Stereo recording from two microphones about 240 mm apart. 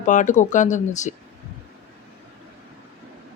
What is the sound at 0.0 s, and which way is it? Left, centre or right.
Speech, left.